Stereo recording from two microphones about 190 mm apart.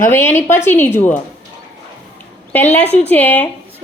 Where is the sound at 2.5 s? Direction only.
10° left (ahead or behind).